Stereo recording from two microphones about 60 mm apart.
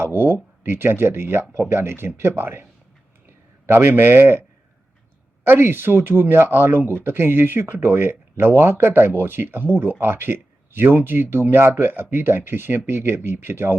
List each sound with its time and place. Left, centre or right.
0.0 s speech: right
3.7 s speech: right